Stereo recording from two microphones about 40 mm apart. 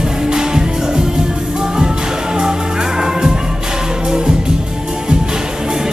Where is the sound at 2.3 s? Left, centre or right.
Centre.